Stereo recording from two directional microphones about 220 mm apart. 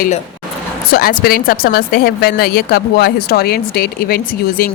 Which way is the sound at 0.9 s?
45° left (ahead or behind).